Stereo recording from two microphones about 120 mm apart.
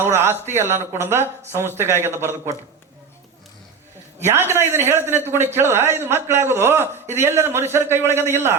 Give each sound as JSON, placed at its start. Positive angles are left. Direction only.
{"t": 0.1, "sound": "a man's voice", "side_deg": -20}
{"t": 4.2, "sound": "a man's voice", "side_deg": -20}